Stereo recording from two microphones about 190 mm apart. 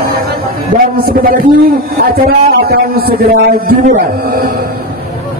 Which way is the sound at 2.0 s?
55° right (ahead or behind).